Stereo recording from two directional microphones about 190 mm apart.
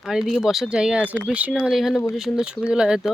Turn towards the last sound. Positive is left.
turn(degrees=-5)  # may be behind; listen again after turning